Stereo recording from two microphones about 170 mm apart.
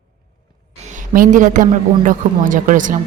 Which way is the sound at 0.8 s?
50° right (ahead or behind).